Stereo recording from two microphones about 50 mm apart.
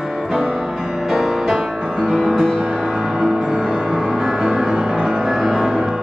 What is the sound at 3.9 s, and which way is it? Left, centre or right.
Music, centre.